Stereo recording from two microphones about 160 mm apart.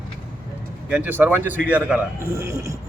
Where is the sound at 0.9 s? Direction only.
10° right (ahead or behind).